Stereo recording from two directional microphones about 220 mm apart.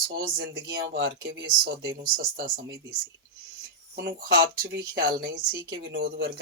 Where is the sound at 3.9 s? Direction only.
45° right (ahead or behind).